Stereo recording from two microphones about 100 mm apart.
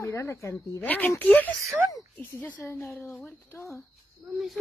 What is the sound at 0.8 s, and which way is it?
A woman's voice, 15° left (ahead or behind).